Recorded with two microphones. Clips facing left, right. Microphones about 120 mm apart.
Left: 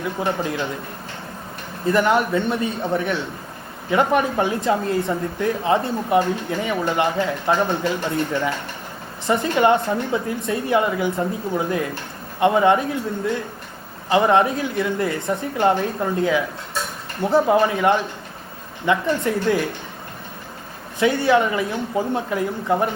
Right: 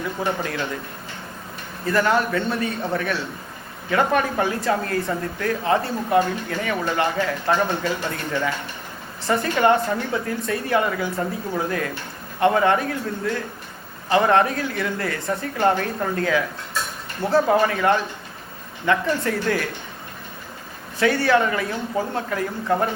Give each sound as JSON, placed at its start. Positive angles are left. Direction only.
{"t": 0.0, "sound": "speech", "side_deg": 20}
{"t": 1.8, "sound": "speech", "side_deg": 20}
{"t": 21.0, "sound": "speech", "side_deg": 20}